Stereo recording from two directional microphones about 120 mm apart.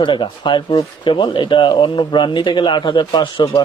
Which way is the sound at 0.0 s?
40° left (ahead or behind).